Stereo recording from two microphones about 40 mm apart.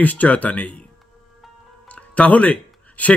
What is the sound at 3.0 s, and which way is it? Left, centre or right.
Speech, left.